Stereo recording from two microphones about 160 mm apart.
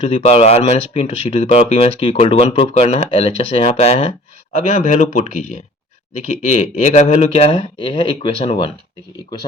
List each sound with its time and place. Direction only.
0.0 s speech: 40° left (ahead or behind)